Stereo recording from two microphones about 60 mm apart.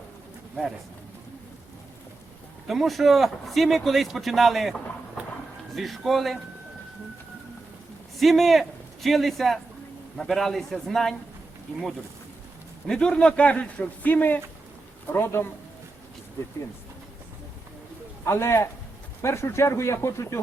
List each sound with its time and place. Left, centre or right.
2.6 s a man's voice: centre
8.2 s a man's voice: centre
12.9 s a man's voice: centre; by 15.4 s left
18.3 s speech: left